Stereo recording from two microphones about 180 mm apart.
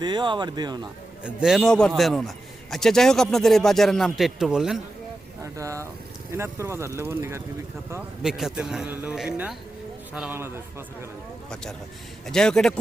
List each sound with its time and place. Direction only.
0.0 s speech: 25° right (ahead or behind)
1.2 s a man's voice: 5° right (ahead or behind)
5.4 s speech: 20° right (ahead or behind)
8.2 s a man's voice: 5° right (ahead or behind)
12.3 s a man's voice: 5° left (ahead or behind)